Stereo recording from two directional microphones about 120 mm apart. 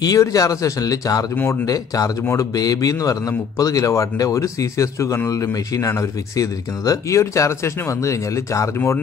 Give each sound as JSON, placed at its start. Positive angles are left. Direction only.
{"t": 0.0, "sound": "speech", "side_deg": 30}